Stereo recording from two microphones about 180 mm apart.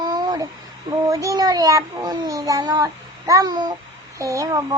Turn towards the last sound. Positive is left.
turn(degrees=-20)  # may be behind; listen again after turning